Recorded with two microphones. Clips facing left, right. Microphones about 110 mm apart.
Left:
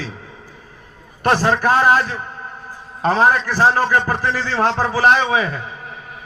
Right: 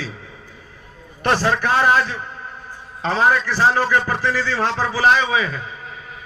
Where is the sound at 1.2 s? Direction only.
45° left (ahead or behind).